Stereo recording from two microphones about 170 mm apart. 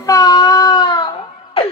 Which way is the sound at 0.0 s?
20° left (ahead or behind).